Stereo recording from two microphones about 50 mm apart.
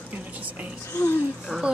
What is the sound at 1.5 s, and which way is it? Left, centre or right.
Speech, right.